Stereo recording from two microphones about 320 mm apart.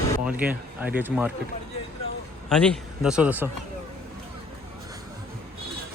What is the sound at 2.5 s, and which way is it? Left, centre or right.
A man's voice, centre.